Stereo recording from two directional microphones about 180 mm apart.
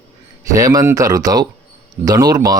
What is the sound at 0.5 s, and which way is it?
Speech, 20° right (ahead or behind).